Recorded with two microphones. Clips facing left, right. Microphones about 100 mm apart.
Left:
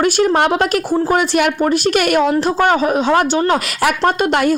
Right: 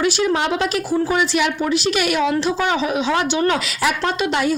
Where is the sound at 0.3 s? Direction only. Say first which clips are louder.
Left 5 dB; 55° left (ahead or behind).